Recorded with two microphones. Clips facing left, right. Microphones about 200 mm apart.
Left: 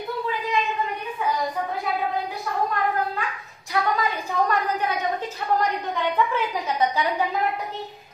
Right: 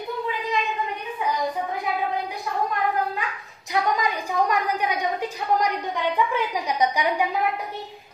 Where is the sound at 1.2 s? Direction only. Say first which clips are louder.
Left 1 dB; 20° right (ahead or behind).